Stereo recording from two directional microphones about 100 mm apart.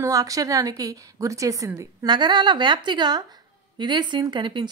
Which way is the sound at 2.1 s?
45° right (ahead or behind).